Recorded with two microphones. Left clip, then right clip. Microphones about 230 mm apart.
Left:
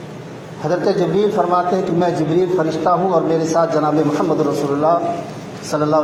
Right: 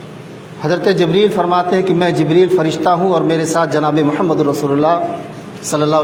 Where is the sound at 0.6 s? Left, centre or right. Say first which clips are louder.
Right 3 dB; right.